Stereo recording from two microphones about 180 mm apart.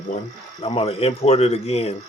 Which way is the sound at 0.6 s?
30° left (ahead or behind).